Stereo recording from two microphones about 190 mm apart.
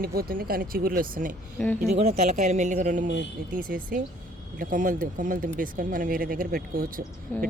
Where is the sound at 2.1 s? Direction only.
35° right (ahead or behind).